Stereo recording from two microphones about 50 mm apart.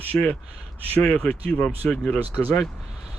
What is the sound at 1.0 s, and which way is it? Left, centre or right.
Speech, centre.